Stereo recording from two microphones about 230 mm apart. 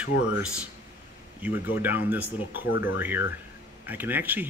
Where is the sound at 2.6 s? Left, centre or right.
Left.